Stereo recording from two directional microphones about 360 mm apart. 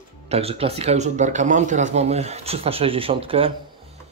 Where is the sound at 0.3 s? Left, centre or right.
Centre.